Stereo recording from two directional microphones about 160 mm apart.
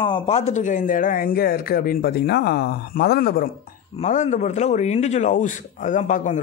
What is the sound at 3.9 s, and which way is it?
A man's voice, 50° left (ahead or behind).